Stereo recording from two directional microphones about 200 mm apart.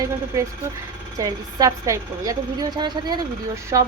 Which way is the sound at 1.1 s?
15° right (ahead or behind).